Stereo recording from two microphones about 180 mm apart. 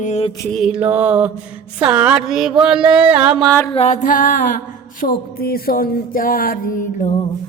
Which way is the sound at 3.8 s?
40° left (ahead or behind).